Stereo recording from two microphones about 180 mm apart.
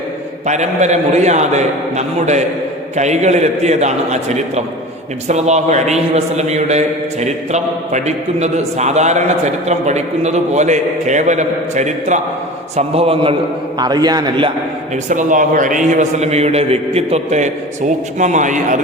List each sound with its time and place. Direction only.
0.4 s a man's voice: 40° right (ahead or behind)
13.7 s a man's voice: 20° right (ahead or behind)
15.1 s a man's voice: 45° right (ahead or behind)